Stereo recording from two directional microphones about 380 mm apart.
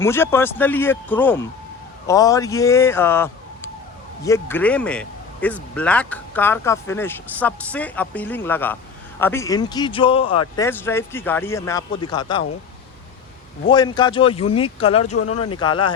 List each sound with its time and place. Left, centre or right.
0.0 s speech: centre
13.7 s speech: centre
15.0 s speech: left
15.5 s speech: centre